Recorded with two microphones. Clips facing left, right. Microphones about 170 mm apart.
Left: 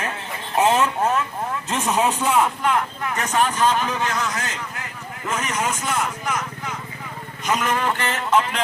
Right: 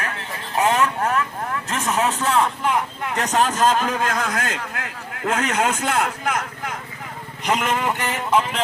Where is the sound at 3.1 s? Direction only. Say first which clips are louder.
Right 1 dB; 35° right (ahead or behind); by 6.7 s 55° right (ahead or behind).